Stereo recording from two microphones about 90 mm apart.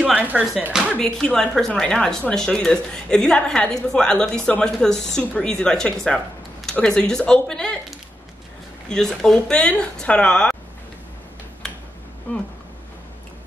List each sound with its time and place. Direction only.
0.1 s speech: 15° right (ahead or behind)
0.9 s a woman's voice: 10° left (ahead or behind)
8.8 s a woman's voice: 5° left (ahead or behind)
12.3 s speech: 20° left (ahead or behind)